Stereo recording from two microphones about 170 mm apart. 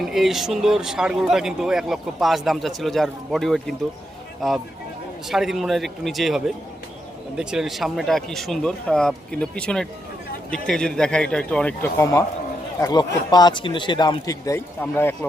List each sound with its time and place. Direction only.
0.0 s speech: centre (ahead or behind)
5.3 s a man's voice: centre (ahead or behind)